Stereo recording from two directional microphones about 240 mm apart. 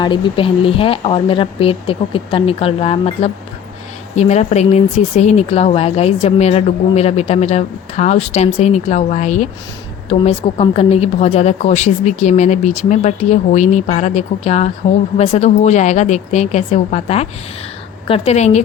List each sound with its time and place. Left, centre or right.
0.0 s speech: left